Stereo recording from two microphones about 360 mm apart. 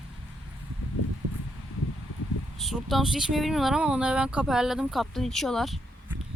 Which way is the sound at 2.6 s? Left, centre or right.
Centre.